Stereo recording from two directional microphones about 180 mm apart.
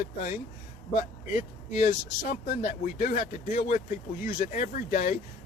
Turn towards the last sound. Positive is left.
turn(degrees=45)  # may be behind; listen again after turning